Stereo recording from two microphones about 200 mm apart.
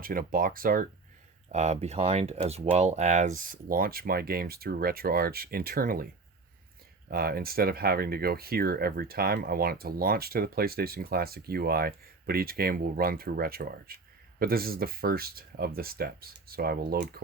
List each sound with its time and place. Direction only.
0.0 s speech: 45° right (ahead or behind)
1.5 s speech: 35° right (ahead or behind)
7.1 s speech: 50° right (ahead or behind)